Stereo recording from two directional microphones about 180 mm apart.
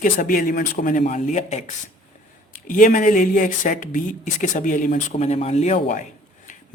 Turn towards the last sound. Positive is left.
turn(degrees=45)  # may be behind; listen again after turning